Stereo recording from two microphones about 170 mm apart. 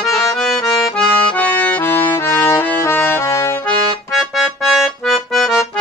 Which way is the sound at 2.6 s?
15° left (ahead or behind).